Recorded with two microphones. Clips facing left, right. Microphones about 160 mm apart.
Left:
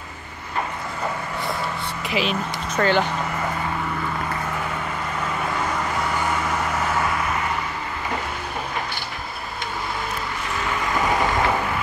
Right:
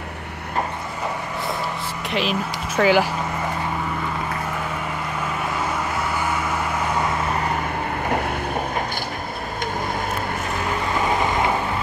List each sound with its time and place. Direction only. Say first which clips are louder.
2.0 s speech: right 1 dB; centre (ahead or behind)
8.0 s vehicle: right 5 dB; 55° right (ahead or behind)